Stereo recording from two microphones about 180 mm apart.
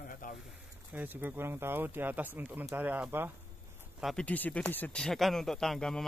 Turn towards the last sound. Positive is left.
turn(degrees=5)  # may be behind; listen again after turning